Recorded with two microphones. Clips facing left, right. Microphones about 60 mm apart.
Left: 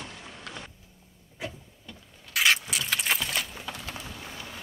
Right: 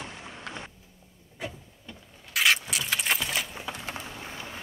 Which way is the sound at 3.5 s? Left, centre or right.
Right.